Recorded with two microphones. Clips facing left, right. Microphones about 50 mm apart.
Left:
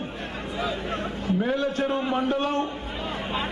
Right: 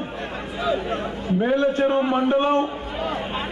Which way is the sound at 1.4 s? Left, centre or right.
Right.